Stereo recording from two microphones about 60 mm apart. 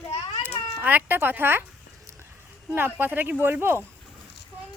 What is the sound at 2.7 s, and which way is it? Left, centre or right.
Speech, right.